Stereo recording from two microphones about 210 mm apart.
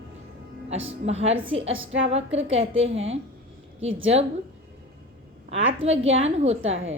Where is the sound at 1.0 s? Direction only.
30° right (ahead or behind).